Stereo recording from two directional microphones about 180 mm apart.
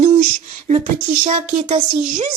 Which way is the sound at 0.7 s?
35° right (ahead or behind).